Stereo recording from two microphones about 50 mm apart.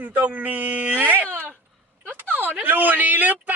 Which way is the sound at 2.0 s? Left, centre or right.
Right.